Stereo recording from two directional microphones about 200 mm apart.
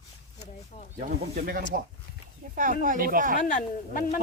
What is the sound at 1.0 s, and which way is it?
Speech, 45° right (ahead or behind).